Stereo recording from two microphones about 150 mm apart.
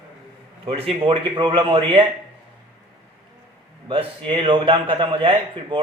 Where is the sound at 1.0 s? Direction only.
35° right (ahead or behind).